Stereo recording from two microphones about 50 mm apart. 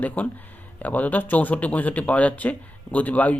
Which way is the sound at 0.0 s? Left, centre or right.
Left.